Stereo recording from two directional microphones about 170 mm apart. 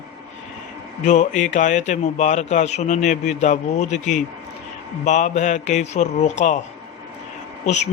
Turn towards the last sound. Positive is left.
turn(degrees=45)  # may be behind; listen again after turning